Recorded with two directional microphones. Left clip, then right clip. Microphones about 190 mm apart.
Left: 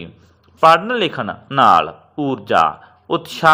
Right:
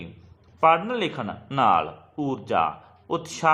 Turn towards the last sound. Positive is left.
turn(degrees=15)  # may be behind; listen again after turning